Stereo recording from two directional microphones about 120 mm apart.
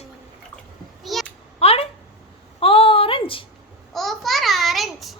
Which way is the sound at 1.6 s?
55° left (ahead or behind).